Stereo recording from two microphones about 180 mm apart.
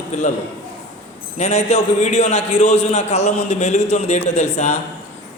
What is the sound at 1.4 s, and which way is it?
A man's voice, 35° left (ahead or behind).